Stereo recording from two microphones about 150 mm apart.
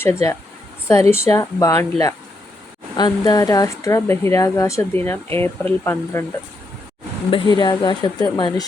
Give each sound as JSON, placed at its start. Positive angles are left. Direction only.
{"t": 0.0, "sound": "speech", "side_deg": 15}
{"t": 7.3, "sound": "speech", "side_deg": 30}